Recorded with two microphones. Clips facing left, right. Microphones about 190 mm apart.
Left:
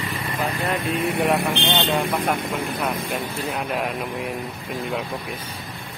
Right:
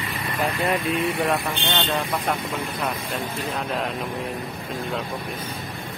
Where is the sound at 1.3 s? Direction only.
20° left (ahead or behind).